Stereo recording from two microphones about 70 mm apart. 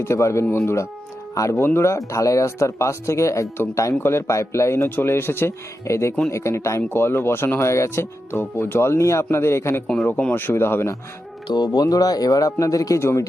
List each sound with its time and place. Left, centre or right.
0.0 s speech: left
2.0 s speech: left
3.9 s speech: left
4.9 s speech: left
5.8 s speech: left
9.8 s speech: centre
10.3 s speech: left
11.4 s speech: left
13.0 s speech: left